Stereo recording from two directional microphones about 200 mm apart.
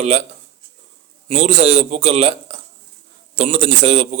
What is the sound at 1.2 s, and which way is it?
Speech, 35° right (ahead or behind).